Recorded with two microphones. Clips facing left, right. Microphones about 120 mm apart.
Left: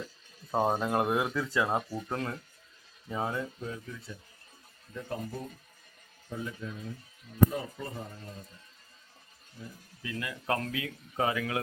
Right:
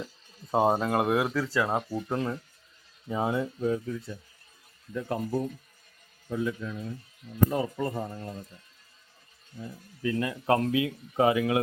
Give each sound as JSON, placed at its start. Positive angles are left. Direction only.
{"t": 0.5, "sound": "speech", "side_deg": -10}
{"t": 3.1, "sound": "speech", "side_deg": -20}
{"t": 3.6, "sound": "speech", "side_deg": -40}
{"t": 4.9, "sound": "speech", "side_deg": -70}
{"t": 6.3, "sound": "speech", "side_deg": -90}
{"t": 10.0, "sound": "speech", "side_deg": -35}